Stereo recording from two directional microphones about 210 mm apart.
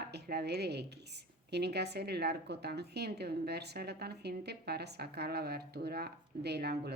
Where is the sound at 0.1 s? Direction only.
50° right (ahead or behind).